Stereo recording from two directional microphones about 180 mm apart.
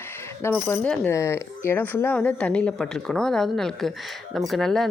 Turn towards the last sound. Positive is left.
turn(degrees=0)  # may be behind; listen again after turning